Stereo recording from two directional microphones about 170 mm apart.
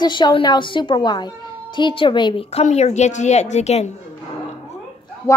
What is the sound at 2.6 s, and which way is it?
A woman's voice, 40° left (ahead or behind).